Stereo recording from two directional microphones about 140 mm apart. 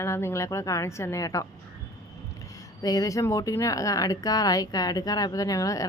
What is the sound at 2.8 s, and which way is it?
A woman's voice, 25° left (ahead or behind).